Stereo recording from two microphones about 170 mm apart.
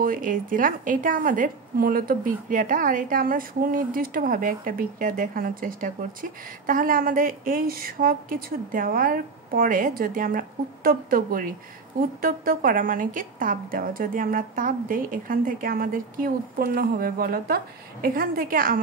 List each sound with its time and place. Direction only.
0.0 s a woman's voice: 55° right (ahead or behind)